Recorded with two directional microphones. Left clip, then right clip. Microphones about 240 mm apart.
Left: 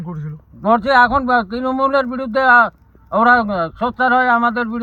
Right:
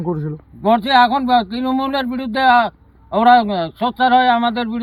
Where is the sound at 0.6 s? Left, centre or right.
Centre.